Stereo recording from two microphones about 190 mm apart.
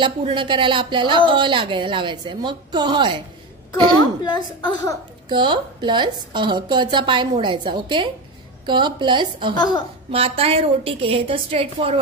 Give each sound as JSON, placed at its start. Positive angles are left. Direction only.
{"t": 0.0, "sound": "a woman's voice", "side_deg": -25}
{"t": 4.0, "sound": "a woman's voice", "side_deg": 20}
{"t": 5.3, "sound": "a woman's voice", "side_deg": -25}